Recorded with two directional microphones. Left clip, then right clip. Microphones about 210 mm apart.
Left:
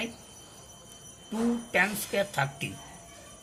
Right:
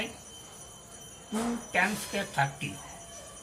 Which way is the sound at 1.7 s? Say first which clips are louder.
Left 1 dB; 55° left (ahead or behind).